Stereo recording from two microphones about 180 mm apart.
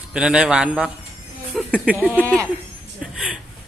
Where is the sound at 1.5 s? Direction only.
Centre (ahead or behind).